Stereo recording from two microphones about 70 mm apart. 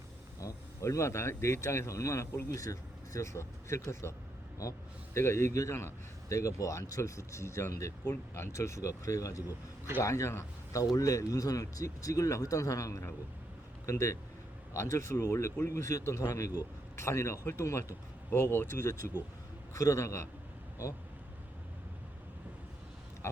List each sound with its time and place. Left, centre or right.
0.3 s speech: left
5.1 s speech: left
6.2 s speech: left
23.2 s a sound: left